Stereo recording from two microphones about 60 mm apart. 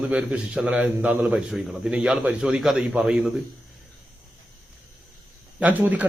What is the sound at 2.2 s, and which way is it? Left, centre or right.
Speech, right.